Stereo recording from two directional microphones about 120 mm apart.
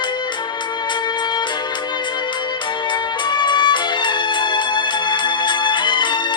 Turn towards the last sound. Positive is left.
turn(degrees=40)  # may be behind; listen again after turning